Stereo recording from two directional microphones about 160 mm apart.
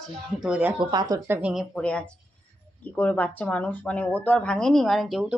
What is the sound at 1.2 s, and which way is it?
Speech, 15° right (ahead or behind).